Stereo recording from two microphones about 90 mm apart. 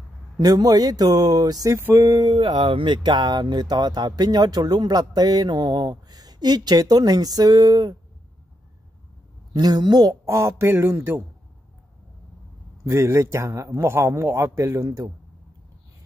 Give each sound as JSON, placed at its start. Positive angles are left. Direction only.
{"t": 0.4, "sound": "speech", "side_deg": -45}
{"t": 1.8, "sound": "a sound", "side_deg": -25}
{"t": 2.0, "sound": "speech", "side_deg": -45}
{"t": 2.3, "sound": "speech", "side_deg": -80}
{"t": 9.5, "sound": "a man's voice", "side_deg": -50}
{"t": 12.8, "sound": "a man's voice", "side_deg": -30}